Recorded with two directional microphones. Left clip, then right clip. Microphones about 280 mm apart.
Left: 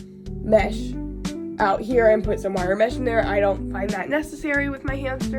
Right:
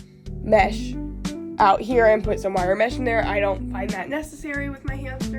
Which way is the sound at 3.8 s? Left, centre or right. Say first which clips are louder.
Left 5 dB; centre.